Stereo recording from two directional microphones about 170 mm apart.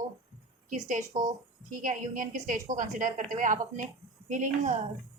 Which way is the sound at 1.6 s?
50° right (ahead or behind).